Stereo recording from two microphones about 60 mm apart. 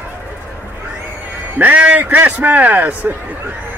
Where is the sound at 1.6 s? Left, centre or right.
Right.